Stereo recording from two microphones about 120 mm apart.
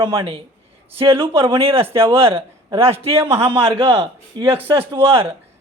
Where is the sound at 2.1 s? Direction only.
55° right (ahead or behind).